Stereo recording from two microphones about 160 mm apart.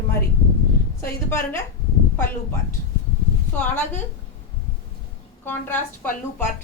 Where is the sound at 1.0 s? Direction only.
15° left (ahead or behind).